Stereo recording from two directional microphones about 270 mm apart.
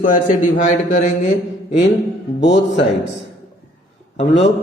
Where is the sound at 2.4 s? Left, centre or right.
Left.